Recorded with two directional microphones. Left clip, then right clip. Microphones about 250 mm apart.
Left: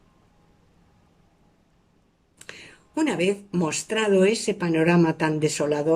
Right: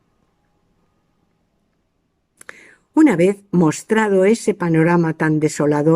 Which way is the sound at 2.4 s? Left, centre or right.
Right.